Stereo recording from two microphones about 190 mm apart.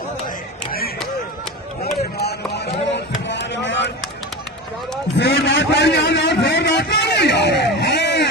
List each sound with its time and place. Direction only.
1.8 s chop: 55° left (ahead or behind)
5.1 s a sound: 65° left (ahead or behind)
7.8 s vehicle: 65° left (ahead or behind)